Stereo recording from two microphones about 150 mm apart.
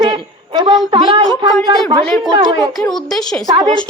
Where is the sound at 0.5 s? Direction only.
25° right (ahead or behind).